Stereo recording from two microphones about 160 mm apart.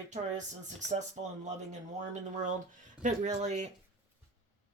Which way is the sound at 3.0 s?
50° right (ahead or behind).